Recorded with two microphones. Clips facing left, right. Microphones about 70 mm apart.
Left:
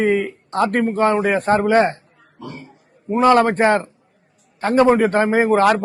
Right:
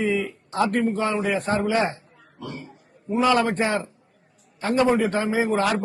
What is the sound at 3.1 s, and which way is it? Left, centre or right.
A man's voice, left.